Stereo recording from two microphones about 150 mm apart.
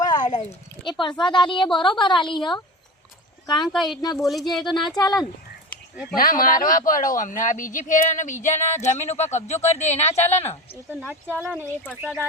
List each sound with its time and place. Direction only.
0.2 s a sound: 55° left (ahead or behind)
0.9 s a woman's voice: 30° left (ahead or behind)
6.1 s a man's voice: 70° left (ahead or behind); by 10.5 s 45° left (ahead or behind)
11.0 s speech: 10° right (ahead or behind)